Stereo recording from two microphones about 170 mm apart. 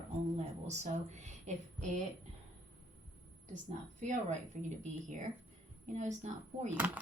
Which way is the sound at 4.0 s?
45° right (ahead or behind).